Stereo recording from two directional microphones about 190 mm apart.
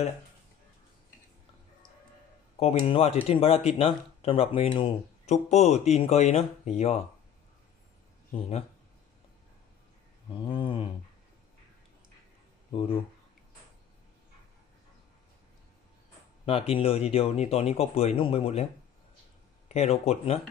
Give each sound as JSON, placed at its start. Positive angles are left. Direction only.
{"t": 2.6, "sound": "speech", "side_deg": 40}
{"t": 10.4, "sound": "speech", "side_deg": 25}
{"t": 12.7, "sound": "speech", "side_deg": 30}
{"t": 16.4, "sound": "speech", "side_deg": 30}
{"t": 19.7, "sound": "speech", "side_deg": 35}